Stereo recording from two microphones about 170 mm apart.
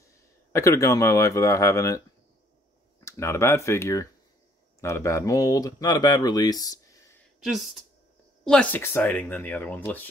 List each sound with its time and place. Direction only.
0.0 s speech: 15° left (ahead or behind)
3.1 s speech: 15° left (ahead or behind)
7.3 s speech: centre (ahead or behind)
8.5 s speech: 10° left (ahead or behind)